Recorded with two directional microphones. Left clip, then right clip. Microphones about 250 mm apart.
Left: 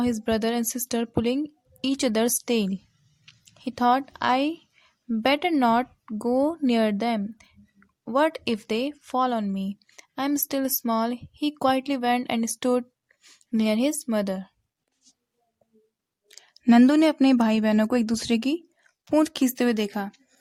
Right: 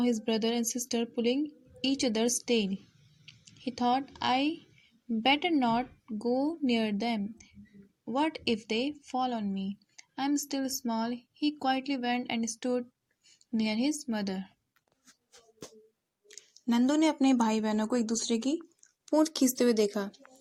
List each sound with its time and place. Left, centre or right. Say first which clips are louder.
0.0 s speech: left 5 dB; left
16.3 s speech: left 12 dB; left